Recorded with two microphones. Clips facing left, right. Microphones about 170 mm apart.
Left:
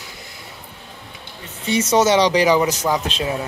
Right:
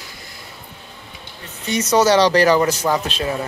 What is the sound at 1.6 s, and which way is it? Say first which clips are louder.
Speech: even; 25° left (ahead or behind).